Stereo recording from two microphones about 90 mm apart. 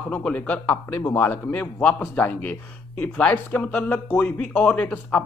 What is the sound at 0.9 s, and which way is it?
A man's voice, 25° left (ahead or behind).